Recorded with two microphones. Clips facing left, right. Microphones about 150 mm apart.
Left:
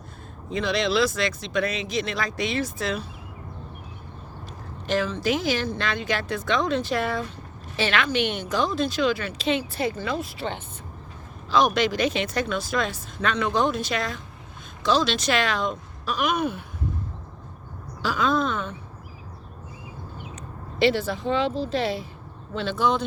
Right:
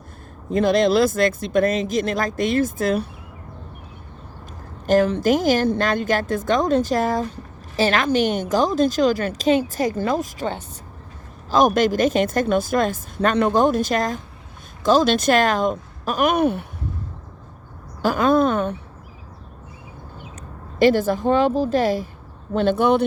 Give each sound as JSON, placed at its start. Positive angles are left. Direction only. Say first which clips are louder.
{"t": 0.5, "sound": "a woman's voice", "louder": "right 7 dB", "side_deg": -50}
{"t": 4.9, "sound": "a woman's voice", "louder": "right 8 dB", "side_deg": -50}
{"t": 18.0, "sound": "a woman's voice", "louder": "right 7 dB", "side_deg": -50}
{"t": 20.7, "sound": "a woman's voice", "louder": "right 6 dB", "side_deg": -45}